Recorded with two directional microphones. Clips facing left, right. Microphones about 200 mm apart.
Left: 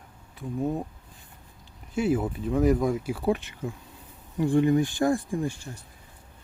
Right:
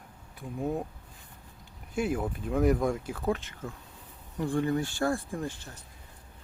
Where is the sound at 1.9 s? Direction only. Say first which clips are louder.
Left 5 dB; 5° left (ahead or behind).